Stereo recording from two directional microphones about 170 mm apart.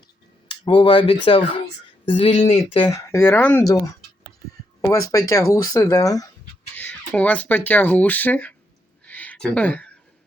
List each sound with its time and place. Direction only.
0.4 s speech: 25° left (ahead or behind); by 3.6 s 10° left (ahead or behind)
4.8 s speech: 20° left (ahead or behind)
6.7 s speech: 10° left (ahead or behind)
9.0 s a sound: 10° left (ahead or behind)